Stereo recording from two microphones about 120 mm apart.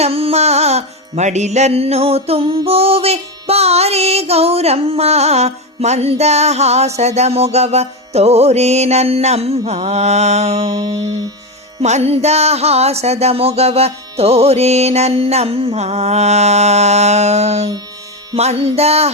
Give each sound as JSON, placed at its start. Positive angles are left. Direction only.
{"t": 0.0, "sound": "music", "side_deg": -55}
{"t": 10.7, "sound": "music", "side_deg": -35}
{"t": 11.8, "sound": "music", "side_deg": -65}